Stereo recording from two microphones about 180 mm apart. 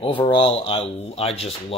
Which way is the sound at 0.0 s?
30° left (ahead or behind).